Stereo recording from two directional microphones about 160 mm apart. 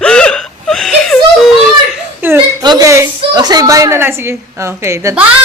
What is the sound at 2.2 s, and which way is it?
Chuckle, 10° right (ahead or behind).